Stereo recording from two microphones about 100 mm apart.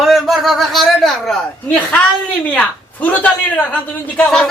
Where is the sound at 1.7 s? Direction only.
15° left (ahead or behind).